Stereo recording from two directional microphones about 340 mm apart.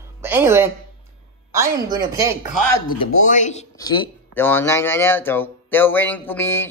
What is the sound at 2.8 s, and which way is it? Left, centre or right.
Speech, left.